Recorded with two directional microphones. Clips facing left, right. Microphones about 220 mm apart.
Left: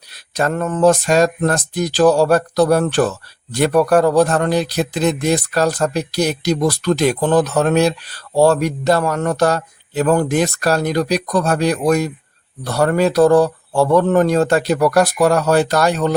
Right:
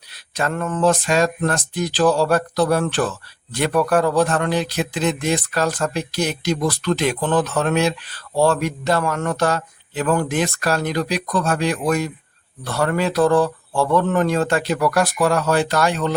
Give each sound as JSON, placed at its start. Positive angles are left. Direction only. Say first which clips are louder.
{"t": 0.1, "sound": "speech", "louder": "left 4 dB", "side_deg": 40}